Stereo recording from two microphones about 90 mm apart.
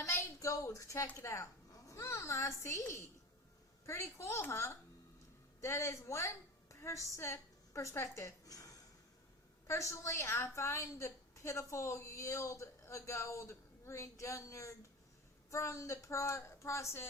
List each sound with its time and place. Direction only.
0.0 s a sound: 35° left (ahead or behind)
1.2 s a woman's voice: 30° left (ahead or behind)
9.6 s a woman's voice: 35° left (ahead or behind)